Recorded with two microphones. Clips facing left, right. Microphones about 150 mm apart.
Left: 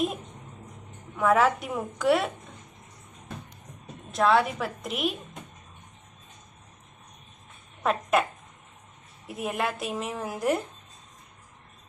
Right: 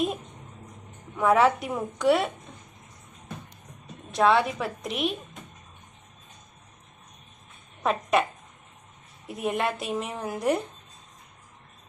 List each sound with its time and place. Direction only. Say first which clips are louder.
1.1 s a woman's voice: right 1 dB; centre (ahead or behind)
4.1 s a woman's voice: right 1 dB; centre (ahead or behind)
7.8 s speech: even; centre (ahead or behind)
9.2 s a woman's voice: right 2 dB; centre (ahead or behind)